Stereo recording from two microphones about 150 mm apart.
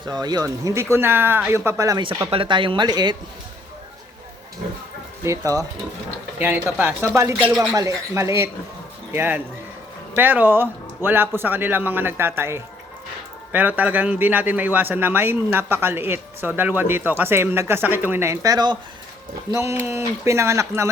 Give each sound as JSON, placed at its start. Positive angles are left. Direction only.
{"t": 0.0, "sound": "speech", "side_deg": -30}
{"t": 2.3, "sound": "speech", "side_deg": -35}
{"t": 5.2, "sound": "a man's voice", "side_deg": -20}
{"t": 7.3, "sound": "a man's voice", "side_deg": -5}
{"t": 7.7, "sound": "a man's voice", "side_deg": -25}